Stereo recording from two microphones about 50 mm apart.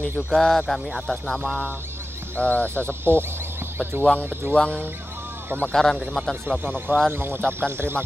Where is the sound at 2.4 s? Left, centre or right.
Left.